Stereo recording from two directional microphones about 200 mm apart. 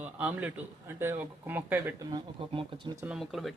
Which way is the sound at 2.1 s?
25° right (ahead or behind).